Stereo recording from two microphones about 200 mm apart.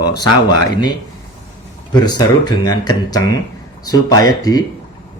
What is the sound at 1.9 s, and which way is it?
A man's voice, 20° left (ahead or behind).